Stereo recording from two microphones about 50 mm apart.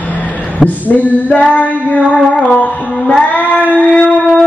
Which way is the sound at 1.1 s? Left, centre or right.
Left.